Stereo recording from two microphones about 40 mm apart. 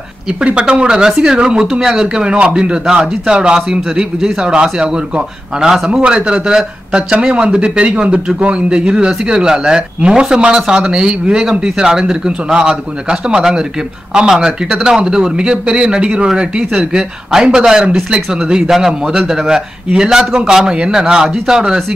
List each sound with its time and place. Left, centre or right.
0.6 s speech: right
2.3 s speech: right